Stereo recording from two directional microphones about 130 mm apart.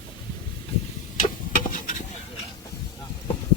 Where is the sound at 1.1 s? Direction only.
90° left.